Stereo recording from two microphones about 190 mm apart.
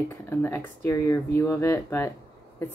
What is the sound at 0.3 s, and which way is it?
A woman's voice, 10° left (ahead or behind).